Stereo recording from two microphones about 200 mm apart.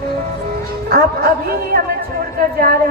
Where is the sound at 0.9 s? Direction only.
50° right (ahead or behind).